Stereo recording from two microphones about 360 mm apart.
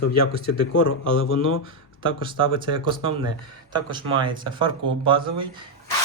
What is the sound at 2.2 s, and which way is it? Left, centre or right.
Speech, centre.